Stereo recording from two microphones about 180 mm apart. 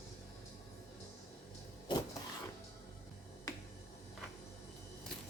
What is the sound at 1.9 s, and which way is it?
Printer, 25° left (ahead or behind).